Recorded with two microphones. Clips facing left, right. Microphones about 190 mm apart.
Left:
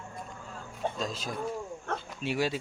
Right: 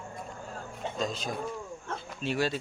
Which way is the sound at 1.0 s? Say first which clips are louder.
Right 2 dB; centre (ahead or behind).